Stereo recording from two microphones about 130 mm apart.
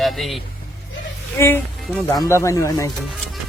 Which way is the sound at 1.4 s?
20° left (ahead or behind).